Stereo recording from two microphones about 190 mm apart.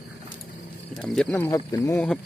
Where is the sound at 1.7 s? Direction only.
15° left (ahead or behind).